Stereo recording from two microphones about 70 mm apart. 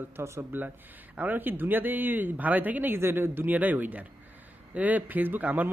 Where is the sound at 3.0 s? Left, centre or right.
Right.